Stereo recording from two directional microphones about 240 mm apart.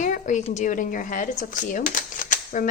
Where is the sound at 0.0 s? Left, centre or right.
Left.